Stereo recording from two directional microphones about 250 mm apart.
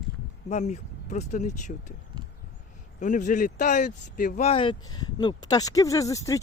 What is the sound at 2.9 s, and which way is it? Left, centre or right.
Speech, left.